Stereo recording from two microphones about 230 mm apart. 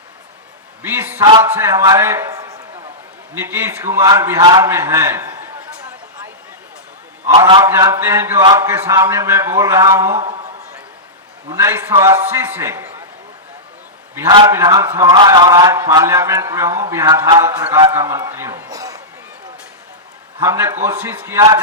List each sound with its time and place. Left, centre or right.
0.8 s a man's voice: centre
1.2 s a man's voice: centre
7.3 s a man's voice: centre
11.4 s a man's voice: centre
14.2 s a man's voice: centre
20.4 s a man's voice: centre